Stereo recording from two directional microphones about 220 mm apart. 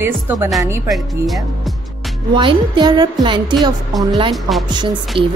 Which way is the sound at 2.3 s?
20° right (ahead or behind).